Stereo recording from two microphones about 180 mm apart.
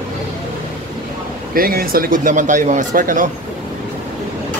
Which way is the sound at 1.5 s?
55° right (ahead or behind).